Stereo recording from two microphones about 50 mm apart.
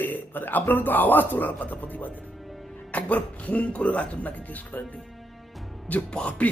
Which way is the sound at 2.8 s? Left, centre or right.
Left.